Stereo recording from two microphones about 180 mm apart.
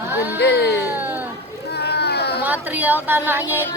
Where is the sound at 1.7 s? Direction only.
65° left (ahead or behind).